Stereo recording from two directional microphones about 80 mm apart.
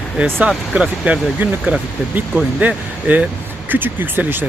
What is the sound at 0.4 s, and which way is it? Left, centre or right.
Speech, centre.